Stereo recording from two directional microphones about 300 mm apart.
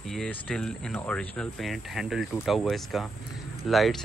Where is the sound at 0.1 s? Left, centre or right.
Centre.